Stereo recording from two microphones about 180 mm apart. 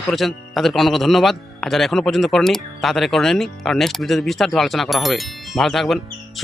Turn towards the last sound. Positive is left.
turn(degrees=0)  # may be behind; listen again after turning